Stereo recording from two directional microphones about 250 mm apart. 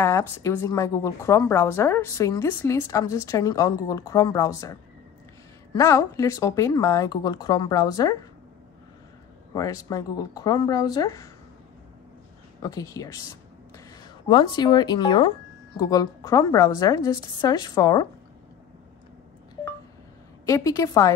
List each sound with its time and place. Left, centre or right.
0.0 s a woman's voice: centre
9.5 s a woman's voice: centre
12.6 s a woman's voice: centre
20.4 s a woman's voice: centre